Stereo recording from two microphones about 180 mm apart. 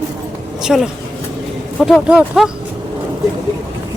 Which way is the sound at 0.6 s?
5° right (ahead or behind).